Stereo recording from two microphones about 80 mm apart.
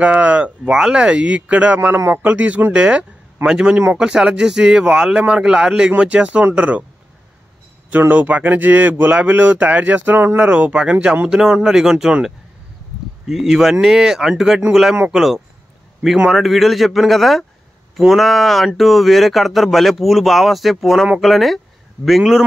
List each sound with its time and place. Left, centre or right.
0.0 s a man's voice: centre
7.9 s a man's voice: right
13.3 s speech: centre